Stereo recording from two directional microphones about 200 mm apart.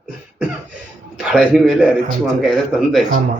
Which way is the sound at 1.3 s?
5° right (ahead or behind).